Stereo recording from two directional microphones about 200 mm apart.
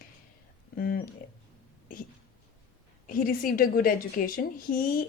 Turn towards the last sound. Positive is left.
turn(degrees=45)  # may be behind; listen again after turning